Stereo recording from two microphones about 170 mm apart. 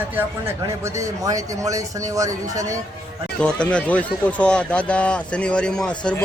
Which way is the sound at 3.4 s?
5° left (ahead or behind).